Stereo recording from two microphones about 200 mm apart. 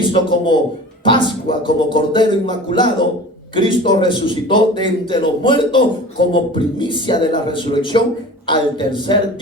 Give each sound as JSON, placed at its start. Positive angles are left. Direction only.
{"t": 0.1, "sound": "a man's voice", "side_deg": 25}